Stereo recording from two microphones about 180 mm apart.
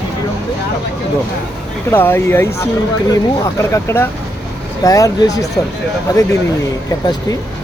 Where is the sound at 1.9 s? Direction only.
10° left (ahead or behind).